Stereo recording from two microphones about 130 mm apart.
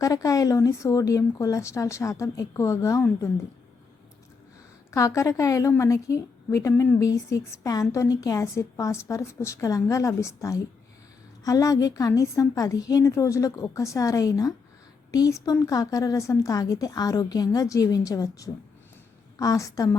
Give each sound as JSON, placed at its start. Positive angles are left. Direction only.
{"t": 0.0, "sound": "a woman's voice", "side_deg": 25}
{"t": 4.9, "sound": "a woman's voice", "side_deg": 25}